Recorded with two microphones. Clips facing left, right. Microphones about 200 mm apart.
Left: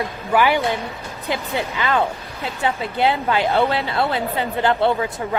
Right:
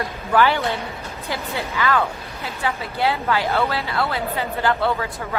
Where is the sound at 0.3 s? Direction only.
15° left (ahead or behind).